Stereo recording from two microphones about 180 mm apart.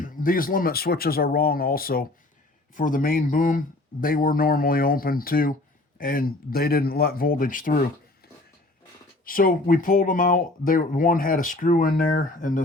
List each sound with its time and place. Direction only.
0.0 s speech: 50° left (ahead or behind)
9.2 s speech: 50° left (ahead or behind)